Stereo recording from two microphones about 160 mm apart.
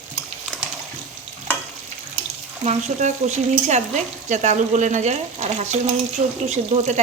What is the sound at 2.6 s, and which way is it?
Frying, 50° right (ahead or behind).